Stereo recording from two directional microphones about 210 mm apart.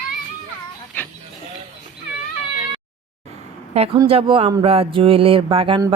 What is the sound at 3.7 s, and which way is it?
A woman's voice, 30° right (ahead or behind).